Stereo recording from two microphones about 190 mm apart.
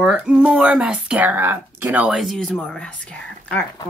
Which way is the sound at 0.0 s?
5° right (ahead or behind).